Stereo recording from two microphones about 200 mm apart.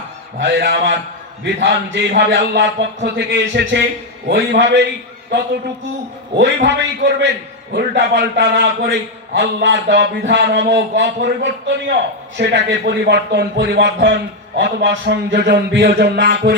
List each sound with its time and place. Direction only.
0.3 s a man's voice: 60° right (ahead or behind)
6.3 s a man's voice: 60° right (ahead or behind)